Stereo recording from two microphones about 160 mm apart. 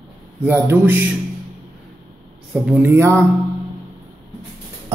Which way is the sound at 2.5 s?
10° right (ahead or behind).